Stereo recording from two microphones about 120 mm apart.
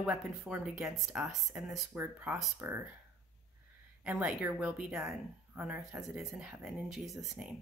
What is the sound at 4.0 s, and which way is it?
Speech, 10° right (ahead or behind).